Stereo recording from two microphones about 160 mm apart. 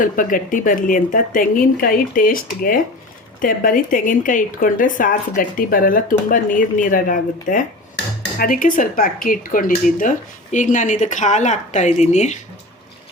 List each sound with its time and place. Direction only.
0.0 s speech: 55° left (ahead or behind)